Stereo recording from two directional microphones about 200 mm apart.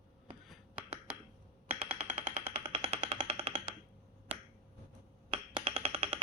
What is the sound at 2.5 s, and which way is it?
Music, 25° right (ahead or behind).